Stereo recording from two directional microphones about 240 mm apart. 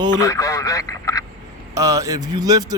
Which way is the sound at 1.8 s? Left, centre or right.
Centre.